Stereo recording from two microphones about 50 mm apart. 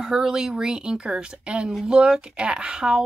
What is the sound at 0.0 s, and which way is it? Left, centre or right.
Speech, centre.